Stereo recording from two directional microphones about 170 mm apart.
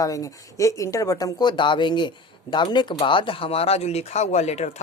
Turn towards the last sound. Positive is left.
turn(degrees=40)  # may be behind; listen again after turning